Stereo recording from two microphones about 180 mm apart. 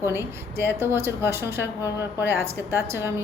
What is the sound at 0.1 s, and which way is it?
A woman's voice, 15° right (ahead or behind).